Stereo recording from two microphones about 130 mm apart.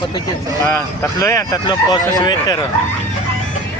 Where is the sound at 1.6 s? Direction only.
35° left (ahead or behind).